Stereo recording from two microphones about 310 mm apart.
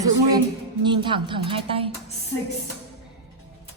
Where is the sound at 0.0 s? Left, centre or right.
Centre.